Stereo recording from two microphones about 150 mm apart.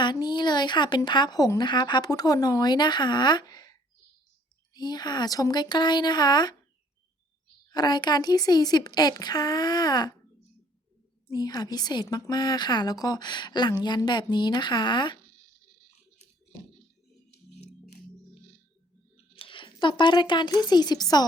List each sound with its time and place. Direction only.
0.0 s speech: 30° left (ahead or behind)
4.7 s speech: 30° left (ahead or behind)
7.7 s speech: 30° left (ahead or behind)
11.3 s speech: 25° left (ahead or behind)
19.3 s speech: 35° left (ahead or behind)